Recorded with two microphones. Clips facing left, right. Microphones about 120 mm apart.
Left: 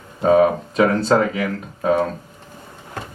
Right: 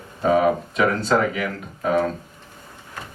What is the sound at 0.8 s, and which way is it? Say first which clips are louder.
Speech: left 6 dB; 35° left (ahead or behind).